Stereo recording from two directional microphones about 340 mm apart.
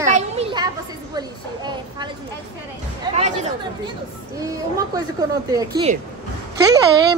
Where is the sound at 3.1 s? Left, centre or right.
Centre.